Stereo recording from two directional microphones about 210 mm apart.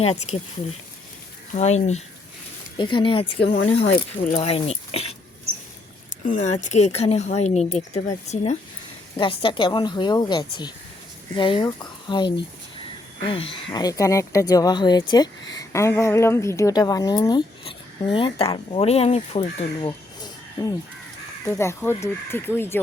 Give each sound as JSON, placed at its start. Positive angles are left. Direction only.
{"t": 1.5, "sound": "a woman's voice", "side_deg": 30}
{"t": 3.4, "sound": "speech", "side_deg": 55}
{"t": 4.2, "sound": "a woman's voice", "side_deg": 35}
{"t": 6.2, "sound": "a woman's voice", "side_deg": 35}